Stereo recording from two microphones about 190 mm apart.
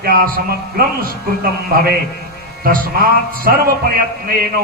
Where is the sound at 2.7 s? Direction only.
50° right (ahead or behind).